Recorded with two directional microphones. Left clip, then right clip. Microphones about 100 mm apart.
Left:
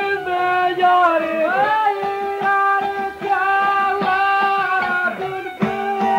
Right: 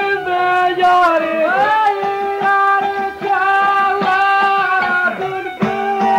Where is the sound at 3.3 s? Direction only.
30° right (ahead or behind); by 5.1 s 15° right (ahead or behind).